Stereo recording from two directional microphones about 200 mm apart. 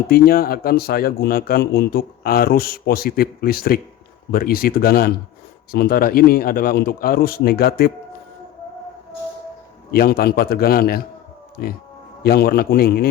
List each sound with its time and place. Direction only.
0.1 s a man's voice: 50° left (ahead or behind)
9.9 s a man's voice: 50° left (ahead or behind)